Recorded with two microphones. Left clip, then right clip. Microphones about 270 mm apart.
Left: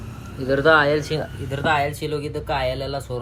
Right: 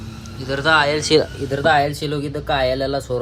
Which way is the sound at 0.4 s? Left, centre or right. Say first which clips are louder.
Even; centre.